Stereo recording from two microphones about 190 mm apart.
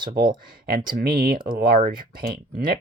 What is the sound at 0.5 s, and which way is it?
Speech, 55° right (ahead or behind).